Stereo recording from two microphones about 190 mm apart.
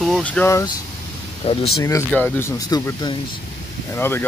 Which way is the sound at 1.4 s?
30° left (ahead or behind).